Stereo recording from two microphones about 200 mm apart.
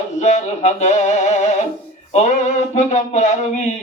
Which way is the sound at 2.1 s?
35° left (ahead or behind).